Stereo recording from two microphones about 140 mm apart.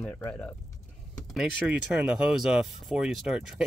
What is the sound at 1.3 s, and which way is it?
Speech, 5° right (ahead or behind).